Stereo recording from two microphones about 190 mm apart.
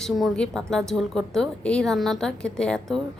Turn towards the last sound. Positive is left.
turn(degrees=5)  # may be behind; listen again after turning